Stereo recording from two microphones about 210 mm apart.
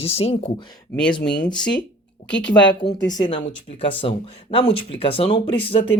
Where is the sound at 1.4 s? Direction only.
20° left (ahead or behind).